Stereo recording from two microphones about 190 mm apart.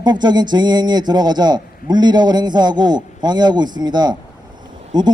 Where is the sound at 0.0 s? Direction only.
20° right (ahead or behind).